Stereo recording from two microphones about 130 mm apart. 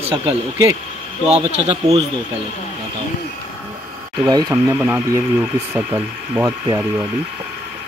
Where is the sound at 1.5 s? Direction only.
55° right (ahead or behind).